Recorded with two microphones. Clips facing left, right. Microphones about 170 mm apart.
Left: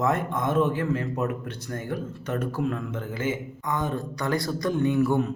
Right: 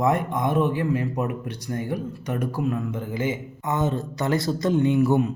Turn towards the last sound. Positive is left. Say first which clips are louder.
# right 3 dB
turn(degrees=-20)  # may be behind; listen again after turning